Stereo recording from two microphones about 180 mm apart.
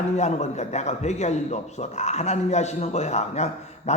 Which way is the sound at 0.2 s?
40° left (ahead or behind).